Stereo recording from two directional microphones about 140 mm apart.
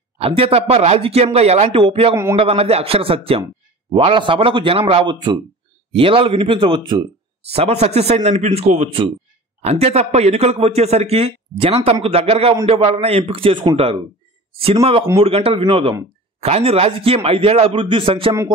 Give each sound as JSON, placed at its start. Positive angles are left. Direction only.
{"t": 0.2, "sound": "a man's voice", "side_deg": -45}